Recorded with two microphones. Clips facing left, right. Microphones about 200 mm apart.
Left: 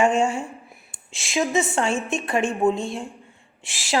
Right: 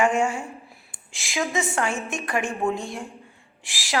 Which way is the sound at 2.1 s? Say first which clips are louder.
Left 4 dB; 25° left (ahead or behind).